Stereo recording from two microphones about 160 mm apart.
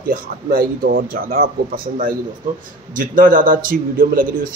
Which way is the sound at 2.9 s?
60° right (ahead or behind).